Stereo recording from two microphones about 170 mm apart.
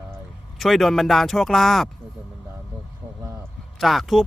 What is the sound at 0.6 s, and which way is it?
Speech, centre (ahead or behind).